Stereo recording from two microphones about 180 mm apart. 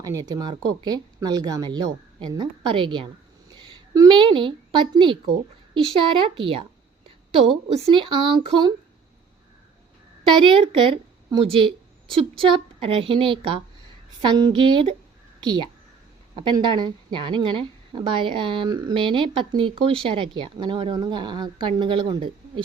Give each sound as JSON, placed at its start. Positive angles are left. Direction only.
{"t": 0.0, "sound": "a woman's voice", "side_deg": -20}
{"t": 10.2, "sound": "a woman's voice", "side_deg": -30}
{"t": 16.3, "sound": "a woman's voice", "side_deg": -25}